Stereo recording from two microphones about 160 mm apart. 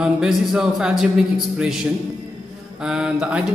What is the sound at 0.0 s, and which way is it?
A man's voice, 5° right (ahead or behind).